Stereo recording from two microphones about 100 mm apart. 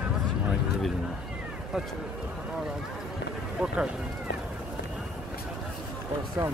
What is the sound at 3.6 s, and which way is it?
Speech, 20° right (ahead or behind).